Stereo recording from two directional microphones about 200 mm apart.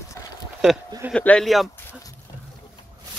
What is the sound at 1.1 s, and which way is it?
Speech, 5° left (ahead or behind).